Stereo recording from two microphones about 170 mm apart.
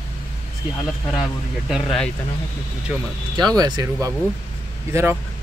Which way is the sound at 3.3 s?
25° right (ahead or behind).